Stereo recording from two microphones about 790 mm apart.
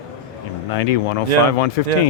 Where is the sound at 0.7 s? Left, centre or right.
Left.